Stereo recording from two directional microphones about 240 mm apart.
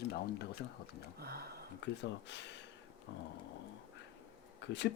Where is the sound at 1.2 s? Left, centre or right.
Right.